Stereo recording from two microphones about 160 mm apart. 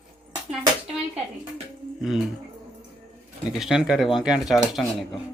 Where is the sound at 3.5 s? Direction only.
5° right (ahead or behind).